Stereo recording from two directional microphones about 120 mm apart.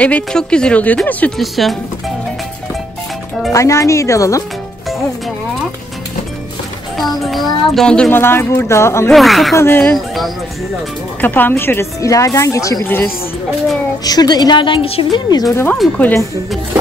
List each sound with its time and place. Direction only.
0.0 s speech: 10° left (ahead or behind)
1.4 s a child's voice: centre (ahead or behind)
3.5 s speech: 25° left (ahead or behind)
7.0 s a child's voice: centre (ahead or behind)
8.1 s speech: 20° left (ahead or behind)
9.1 s a child's voice: centre (ahead or behind)
9.6 s speech: 15° left (ahead or behind)
11.1 s speech: 15° left (ahead or behind)
14.0 s a woman's voice: 35° left (ahead or behind)
15.7 s speech: 10° left (ahead or behind)